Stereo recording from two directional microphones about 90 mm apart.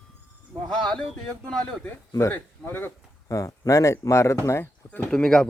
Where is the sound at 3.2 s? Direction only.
35° left (ahead or behind).